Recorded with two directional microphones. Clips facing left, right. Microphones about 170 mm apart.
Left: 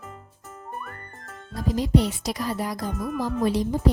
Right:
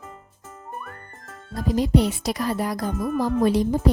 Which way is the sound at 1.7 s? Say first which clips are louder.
Right 2 dB; 55° right (ahead or behind).